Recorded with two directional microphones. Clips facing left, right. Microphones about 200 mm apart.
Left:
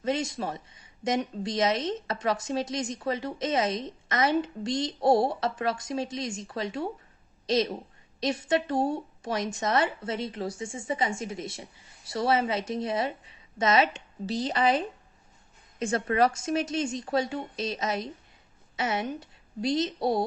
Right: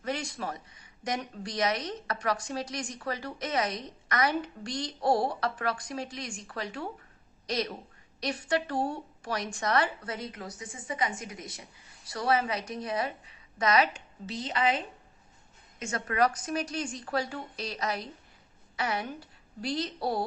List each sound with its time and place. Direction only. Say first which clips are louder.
0.0 s speech: left 5 dB; 20° left (ahead or behind)
15.8 s speech: left 4 dB; 30° left (ahead or behind)